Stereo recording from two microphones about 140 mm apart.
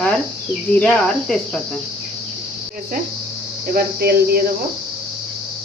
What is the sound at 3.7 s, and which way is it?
Speech, 90° right.